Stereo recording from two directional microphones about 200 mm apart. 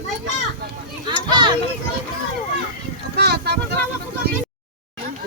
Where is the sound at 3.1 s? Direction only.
55° right (ahead or behind).